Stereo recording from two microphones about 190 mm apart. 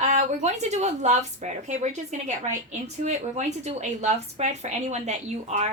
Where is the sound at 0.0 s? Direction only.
40° right (ahead or behind).